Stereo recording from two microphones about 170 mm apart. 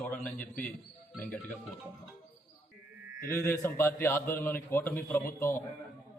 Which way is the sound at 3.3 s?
15° left (ahead or behind).